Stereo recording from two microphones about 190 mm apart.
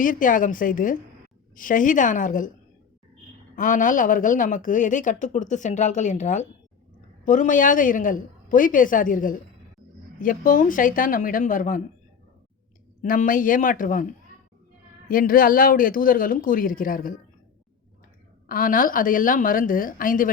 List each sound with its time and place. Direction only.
0.0 s speech: 45° left (ahead or behind)
3.5 s a woman's voice: 45° left (ahead or behind)
13.0 s speech: 45° left (ahead or behind)
15.1 s speech: 50° left (ahead or behind)
18.4 s speech: 50° left (ahead or behind)